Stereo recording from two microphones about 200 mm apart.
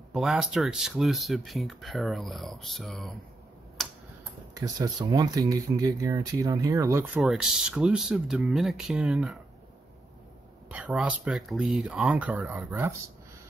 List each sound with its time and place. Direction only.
0.1 s speech: centre (ahead or behind)
3.8 s tick-tock: centre (ahead or behind)
4.6 s speech: 20° right (ahead or behind)
7.2 s speech: centre (ahead or behind)
10.7 s speech: 5° right (ahead or behind)